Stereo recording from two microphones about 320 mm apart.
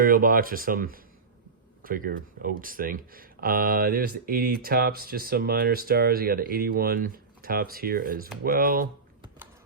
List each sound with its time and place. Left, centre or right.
0.0 s speech: right